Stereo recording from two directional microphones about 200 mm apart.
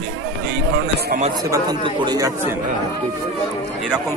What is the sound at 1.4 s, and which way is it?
Speech, 20° right (ahead or behind).